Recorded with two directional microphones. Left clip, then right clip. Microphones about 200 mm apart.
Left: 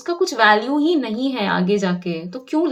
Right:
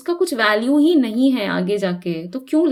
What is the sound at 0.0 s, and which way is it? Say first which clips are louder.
A woman's voice: left 2 dB; 40° right (ahead or behind).